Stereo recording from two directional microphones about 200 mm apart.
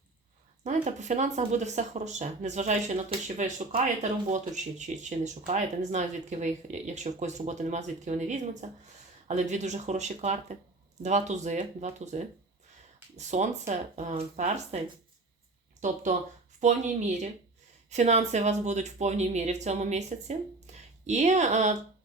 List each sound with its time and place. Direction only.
0.6 s speech: 35° right (ahead or behind)
15.8 s speech: 35° right (ahead or behind)